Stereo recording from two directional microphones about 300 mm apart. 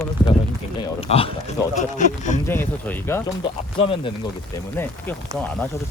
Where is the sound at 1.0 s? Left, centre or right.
Centre.